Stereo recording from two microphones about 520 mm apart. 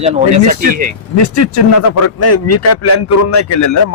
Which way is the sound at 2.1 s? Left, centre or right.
Left.